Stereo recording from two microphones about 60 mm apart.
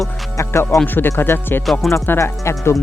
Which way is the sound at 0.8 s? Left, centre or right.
Left.